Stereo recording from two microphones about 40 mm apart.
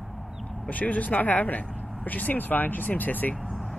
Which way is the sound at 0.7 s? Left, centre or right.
Left.